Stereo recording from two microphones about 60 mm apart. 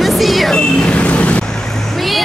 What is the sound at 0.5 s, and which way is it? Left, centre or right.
Vehicle, centre.